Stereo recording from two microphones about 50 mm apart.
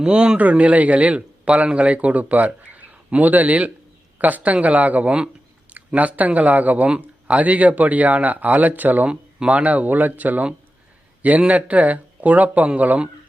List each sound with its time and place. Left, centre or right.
0.0 s a man's voice: right
9.0 s speech: right